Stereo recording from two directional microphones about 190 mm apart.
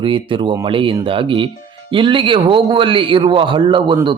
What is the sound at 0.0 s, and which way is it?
A man's voice, 25° right (ahead or behind).